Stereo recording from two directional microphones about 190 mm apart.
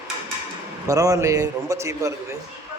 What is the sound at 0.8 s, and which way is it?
A man's voice, 15° right (ahead or behind).